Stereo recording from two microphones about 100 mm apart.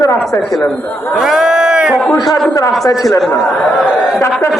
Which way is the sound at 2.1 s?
40° left (ahead or behind).